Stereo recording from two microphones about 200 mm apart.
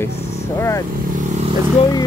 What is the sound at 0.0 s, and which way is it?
Speech, 15° left (ahead or behind).